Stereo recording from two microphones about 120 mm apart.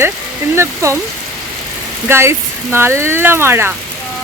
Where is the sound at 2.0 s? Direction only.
20° right (ahead or behind).